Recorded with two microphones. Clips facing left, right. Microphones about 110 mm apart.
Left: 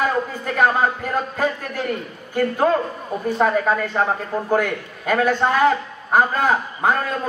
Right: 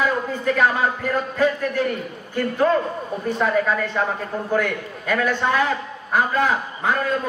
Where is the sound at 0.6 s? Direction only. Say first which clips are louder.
Left 4 dB; 45° left (ahead or behind).